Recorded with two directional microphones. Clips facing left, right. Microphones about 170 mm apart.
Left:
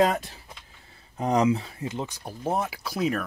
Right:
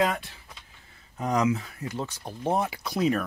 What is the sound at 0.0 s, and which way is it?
Speech, 40° left (ahead or behind).